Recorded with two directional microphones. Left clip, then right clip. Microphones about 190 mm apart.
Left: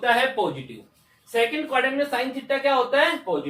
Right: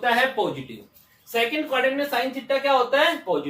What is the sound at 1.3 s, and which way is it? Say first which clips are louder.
A woman's voice: left 1 dB; 20° right (ahead or behind).